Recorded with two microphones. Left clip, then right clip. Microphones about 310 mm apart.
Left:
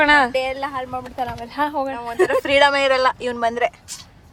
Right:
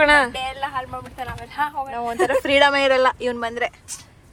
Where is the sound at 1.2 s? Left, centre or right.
Left.